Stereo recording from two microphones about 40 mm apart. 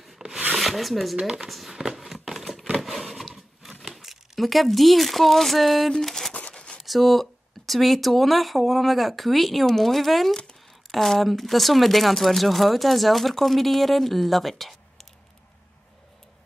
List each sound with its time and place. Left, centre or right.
0.2 s rub: centre
0.6 s speech: centre
1.2 s speech: centre
1.5 s a sound: centre
2.8 s wood: centre
3.9 s speech: centre
6.5 s a sound: left
6.8 s speech: centre